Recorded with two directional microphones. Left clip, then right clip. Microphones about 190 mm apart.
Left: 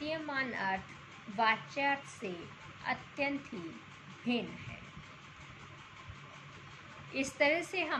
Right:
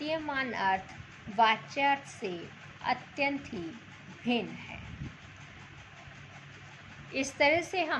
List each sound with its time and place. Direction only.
0.0 s a woman's voice: 25° right (ahead or behind)
7.1 s a woman's voice: 15° right (ahead or behind)